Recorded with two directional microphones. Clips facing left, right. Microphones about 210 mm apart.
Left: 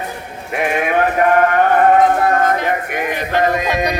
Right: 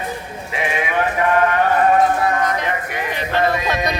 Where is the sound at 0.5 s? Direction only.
60° left (ahead or behind).